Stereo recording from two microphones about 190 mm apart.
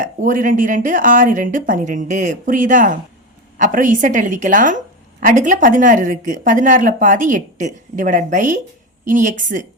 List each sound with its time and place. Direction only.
0.0 s a woman's voice: 45° right (ahead or behind)